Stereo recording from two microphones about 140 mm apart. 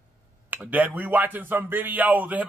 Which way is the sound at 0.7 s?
10° right (ahead or behind).